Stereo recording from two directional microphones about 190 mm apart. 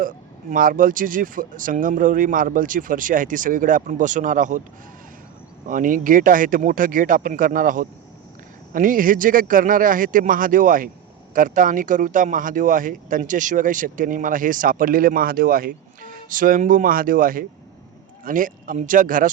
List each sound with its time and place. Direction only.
0.5 s speech: 45° right (ahead or behind)
5.6 s speech: 45° right (ahead or behind)